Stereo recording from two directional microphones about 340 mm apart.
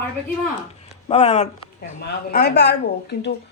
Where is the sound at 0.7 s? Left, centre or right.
Centre.